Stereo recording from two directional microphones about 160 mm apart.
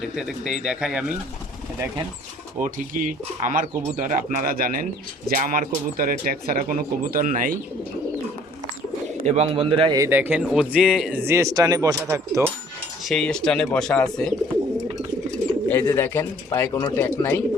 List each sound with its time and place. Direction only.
0.0 s speech: 5° right (ahead or behind)
2.6 s speech: 55° right (ahead or behind)
9.2 s a man's voice: 40° right (ahead or behind)
10.0 s speech: 10° right (ahead or behind)
13.1 s speech: 5° left (ahead or behind)
15.7 s speech: 15° left (ahead or behind)